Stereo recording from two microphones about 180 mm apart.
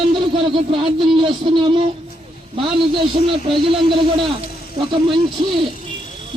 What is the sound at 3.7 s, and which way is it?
Speech, 30° right (ahead or behind).